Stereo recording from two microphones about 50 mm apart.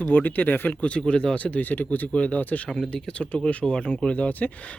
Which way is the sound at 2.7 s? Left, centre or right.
Centre.